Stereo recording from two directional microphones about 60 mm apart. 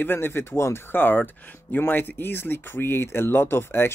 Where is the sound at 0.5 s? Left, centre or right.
Left.